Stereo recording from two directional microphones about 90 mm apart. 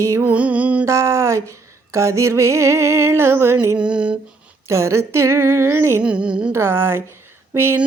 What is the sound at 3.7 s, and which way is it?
Music, 10° right (ahead or behind).